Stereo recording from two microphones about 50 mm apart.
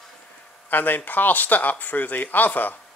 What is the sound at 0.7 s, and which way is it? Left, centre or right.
Speech, left.